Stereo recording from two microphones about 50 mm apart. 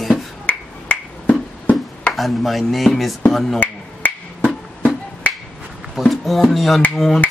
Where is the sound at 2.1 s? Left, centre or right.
Centre.